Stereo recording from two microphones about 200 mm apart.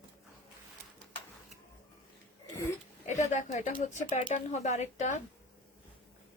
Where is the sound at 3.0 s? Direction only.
35° left (ahead or behind).